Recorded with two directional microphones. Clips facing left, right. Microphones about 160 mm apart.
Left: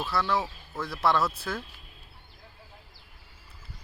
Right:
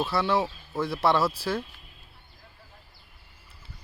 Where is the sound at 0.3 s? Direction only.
25° right (ahead or behind).